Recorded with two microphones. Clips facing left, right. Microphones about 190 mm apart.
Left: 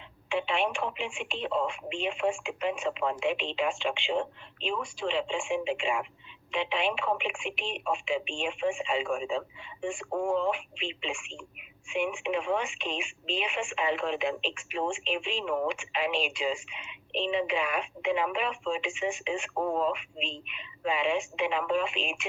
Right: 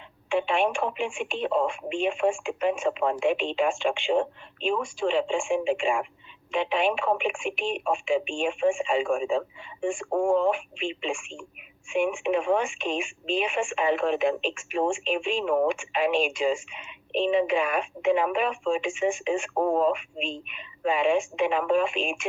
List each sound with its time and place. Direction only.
0.3 s speech: 45° right (ahead or behind)